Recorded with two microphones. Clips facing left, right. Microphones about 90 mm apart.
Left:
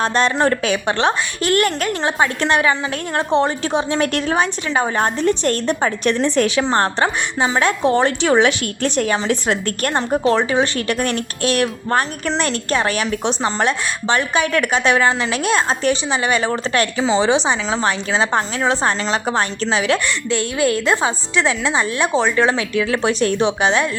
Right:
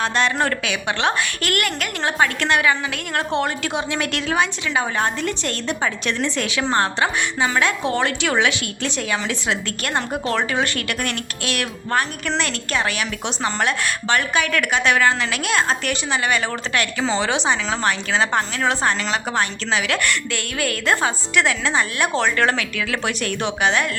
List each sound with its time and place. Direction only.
0.0 s a woman's voice: 35° left (ahead or behind)
0.3 s a woman's voice: 25° left (ahead or behind)
0.6 s a woman's voice: 40° left (ahead or behind)
6.6 s a woman's voice: 30° left (ahead or behind); by 9.9 s 45° left (ahead or behind)
9.9 s a woman's voice: 25° left (ahead or behind)
17.0 s a woman's voice: 20° left (ahead or behind)